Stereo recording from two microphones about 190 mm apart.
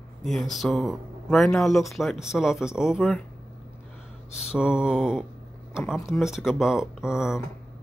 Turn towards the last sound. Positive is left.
turn(degrees=0)  # may be behind; listen again after turning